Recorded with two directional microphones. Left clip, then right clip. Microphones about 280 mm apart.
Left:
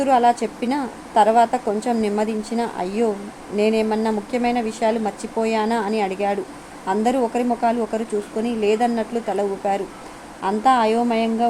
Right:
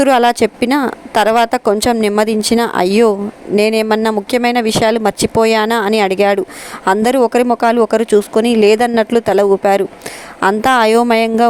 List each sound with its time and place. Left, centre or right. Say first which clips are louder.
0.0 s speech: right 6 dB; right